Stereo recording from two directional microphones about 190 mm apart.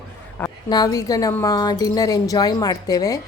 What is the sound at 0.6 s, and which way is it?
Speech, 20° left (ahead or behind).